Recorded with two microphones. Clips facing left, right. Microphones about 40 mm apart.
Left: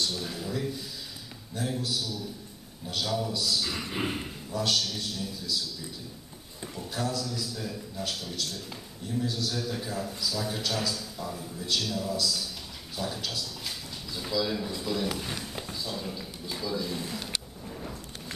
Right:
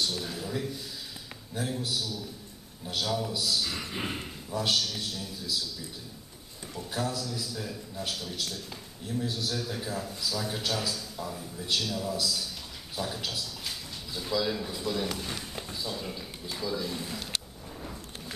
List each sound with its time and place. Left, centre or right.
0.0 s a man's voice: centre
1.6 s a man's voice: centre
4.5 s speech: centre
6.9 s speech: centre
9.2 s a man's voice: centre
9.5 s speech: centre
13.7 s a sound: centre
14.3 s speech: centre
17.7 s a sound: centre